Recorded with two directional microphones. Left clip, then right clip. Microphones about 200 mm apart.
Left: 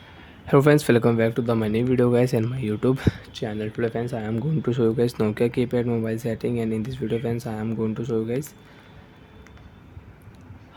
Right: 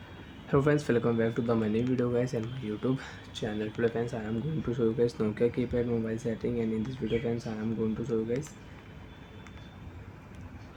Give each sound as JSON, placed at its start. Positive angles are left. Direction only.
{"t": 0.4, "sound": "speech", "side_deg": 50}